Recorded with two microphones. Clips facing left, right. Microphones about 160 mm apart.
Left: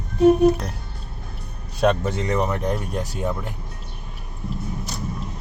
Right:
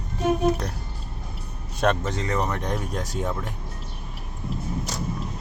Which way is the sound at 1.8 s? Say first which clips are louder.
Left 3 dB; 5° left (ahead or behind).